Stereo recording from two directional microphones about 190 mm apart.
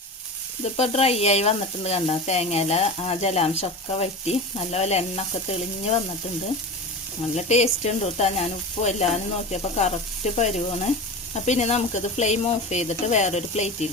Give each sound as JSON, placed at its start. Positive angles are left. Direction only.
{"t": 0.6, "sound": "sizzle", "side_deg": 35}
{"t": 7.3, "sound": "sizzle", "side_deg": 35}